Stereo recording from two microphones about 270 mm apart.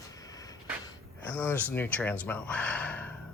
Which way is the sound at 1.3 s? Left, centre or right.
Centre.